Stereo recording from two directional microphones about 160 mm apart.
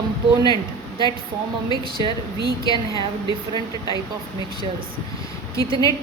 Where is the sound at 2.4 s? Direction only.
25° left (ahead or behind).